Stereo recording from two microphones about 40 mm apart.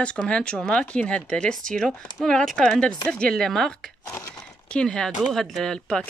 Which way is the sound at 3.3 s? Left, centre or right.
Centre.